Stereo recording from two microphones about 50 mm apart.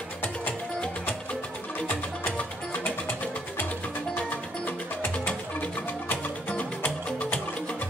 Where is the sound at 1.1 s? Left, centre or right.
Left.